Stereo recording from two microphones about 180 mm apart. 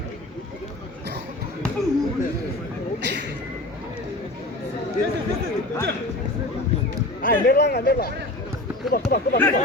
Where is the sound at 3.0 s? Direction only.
70° right (ahead or behind).